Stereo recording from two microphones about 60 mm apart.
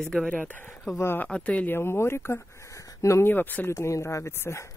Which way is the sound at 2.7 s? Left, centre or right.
Left.